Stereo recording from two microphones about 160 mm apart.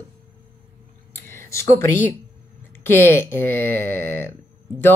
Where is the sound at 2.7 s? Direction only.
15° left (ahead or behind).